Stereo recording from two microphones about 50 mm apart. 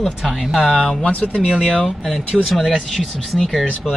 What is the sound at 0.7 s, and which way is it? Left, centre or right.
Speech, centre.